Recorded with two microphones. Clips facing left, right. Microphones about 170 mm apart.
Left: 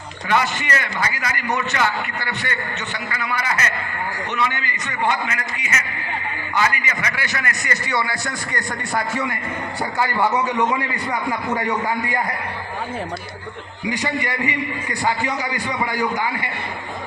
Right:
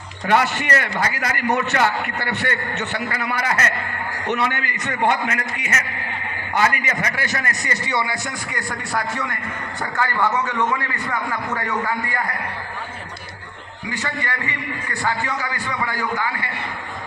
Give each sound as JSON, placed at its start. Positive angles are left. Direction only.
{"t": 0.3, "sound": "a man's voice", "side_deg": -60}
{"t": 8.5, "sound": "a man's voice", "side_deg": 0}
{"t": 13.9, "sound": "a man's voice", "side_deg": 15}